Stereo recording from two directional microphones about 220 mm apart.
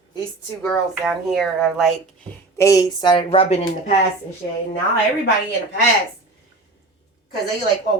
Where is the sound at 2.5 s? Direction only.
15° left (ahead or behind); by 3.9 s 30° left (ahead or behind).